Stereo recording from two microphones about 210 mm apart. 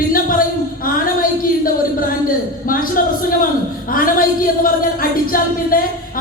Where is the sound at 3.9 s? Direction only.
45° left (ahead or behind).